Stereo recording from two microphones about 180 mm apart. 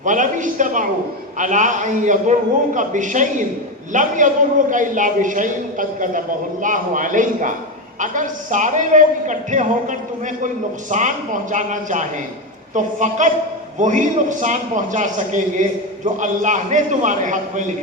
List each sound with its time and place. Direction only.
0.0 s a woman's voice: 45° right (ahead or behind)